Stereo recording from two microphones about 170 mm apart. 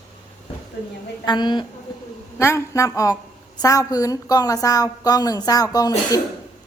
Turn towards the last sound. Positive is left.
turn(degrees=20)  # may be behind; listen again after turning